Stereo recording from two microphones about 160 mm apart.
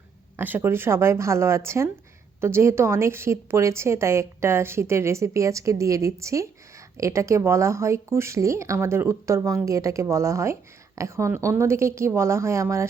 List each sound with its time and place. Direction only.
0.3 s a woman's voice: 10° right (ahead or behind)